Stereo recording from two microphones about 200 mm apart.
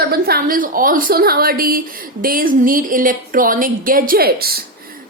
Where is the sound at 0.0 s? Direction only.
50° right (ahead or behind).